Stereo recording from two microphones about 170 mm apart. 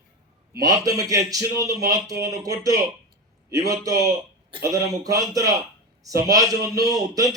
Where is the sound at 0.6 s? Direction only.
20° right (ahead or behind).